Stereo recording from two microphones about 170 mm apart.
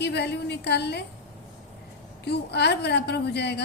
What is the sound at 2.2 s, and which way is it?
A woman's voice, 80° left.